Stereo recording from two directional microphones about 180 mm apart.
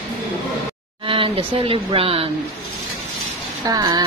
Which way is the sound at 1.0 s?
30° right (ahead or behind).